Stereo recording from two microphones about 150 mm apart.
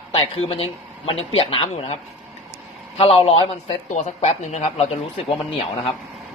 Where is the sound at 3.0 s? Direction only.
40° left (ahead or behind).